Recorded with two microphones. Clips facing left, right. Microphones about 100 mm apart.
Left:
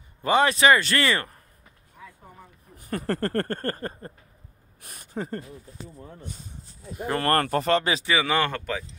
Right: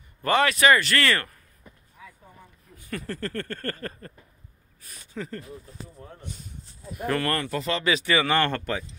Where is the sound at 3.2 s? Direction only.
45° left (ahead or behind).